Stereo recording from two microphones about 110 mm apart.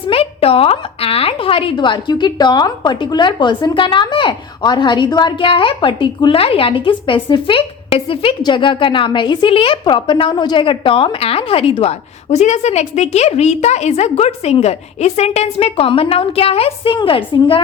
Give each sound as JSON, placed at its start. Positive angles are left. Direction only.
{"t": 0.1, "sound": "a woman's voice", "side_deg": 60}
{"t": 8.4, "sound": "a woman's voice", "side_deg": 45}